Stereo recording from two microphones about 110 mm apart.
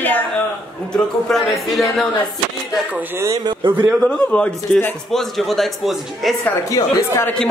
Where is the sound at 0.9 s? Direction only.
5° left (ahead or behind).